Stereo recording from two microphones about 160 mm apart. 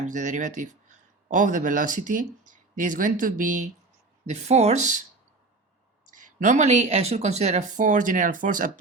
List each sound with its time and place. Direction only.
0.1 s speech: 50° right (ahead or behind)
6.1 s speech: 55° right (ahead or behind)